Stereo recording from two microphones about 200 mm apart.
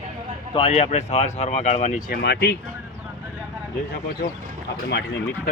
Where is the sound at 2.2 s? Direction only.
55° left (ahead or behind).